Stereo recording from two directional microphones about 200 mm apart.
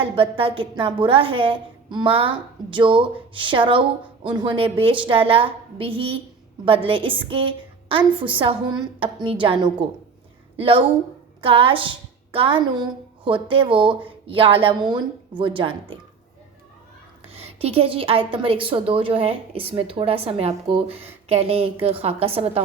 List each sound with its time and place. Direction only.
0.0 s a woman's voice: 25° right (ahead or behind)
17.2 s a woman's voice: 30° right (ahead or behind)